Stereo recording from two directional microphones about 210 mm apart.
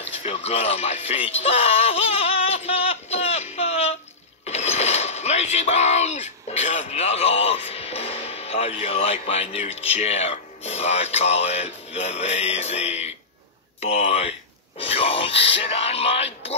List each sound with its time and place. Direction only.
0.2 s music: 30° left (ahead or behind)
4.5 s speech: 30° left (ahead or behind)
14.8 s a sound: 30° left (ahead or behind)